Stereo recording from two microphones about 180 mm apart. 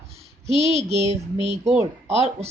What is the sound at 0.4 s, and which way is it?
Speech, 35° right (ahead or behind).